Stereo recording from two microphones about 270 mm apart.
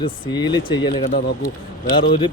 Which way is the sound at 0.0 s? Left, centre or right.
Centre.